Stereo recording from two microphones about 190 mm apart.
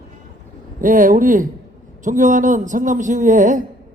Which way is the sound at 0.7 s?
45° right (ahead or behind).